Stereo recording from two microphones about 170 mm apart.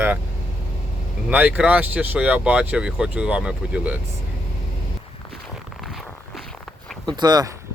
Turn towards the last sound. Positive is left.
turn(degrees=-25)  # may be behind; listen again after turning